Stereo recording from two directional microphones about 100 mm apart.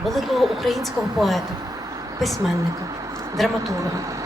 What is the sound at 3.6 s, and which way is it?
Speech, 35° right (ahead or behind).